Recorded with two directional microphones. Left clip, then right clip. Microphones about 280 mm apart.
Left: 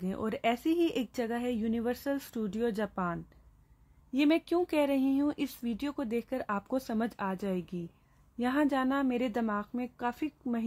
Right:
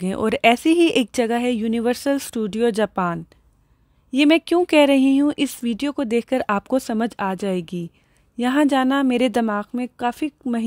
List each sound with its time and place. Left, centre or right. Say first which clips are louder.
0.0 s speech: right 14 dB; right